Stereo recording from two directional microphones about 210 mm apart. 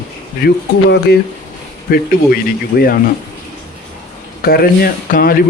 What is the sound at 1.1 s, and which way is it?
Speech, 50° left (ahead or behind).